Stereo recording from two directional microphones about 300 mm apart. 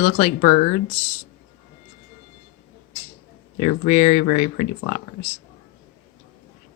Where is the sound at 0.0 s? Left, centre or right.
Left.